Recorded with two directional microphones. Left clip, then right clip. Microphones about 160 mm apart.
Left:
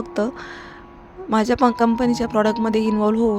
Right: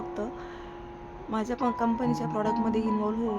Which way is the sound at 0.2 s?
45° left (ahead or behind).